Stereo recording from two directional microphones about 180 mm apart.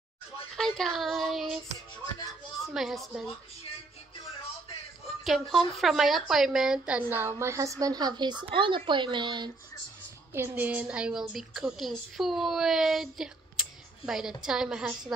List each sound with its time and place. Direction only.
0.6 s a woman's voice: centre (ahead or behind)
2.6 s a woman's voice: centre (ahead or behind)
5.2 s a woman's voice: centre (ahead or behind); by 9.5 s 25° right (ahead or behind)
10.3 s a woman's voice: 10° right (ahead or behind)